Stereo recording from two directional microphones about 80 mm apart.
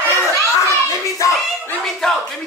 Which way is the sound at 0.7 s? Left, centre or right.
Left.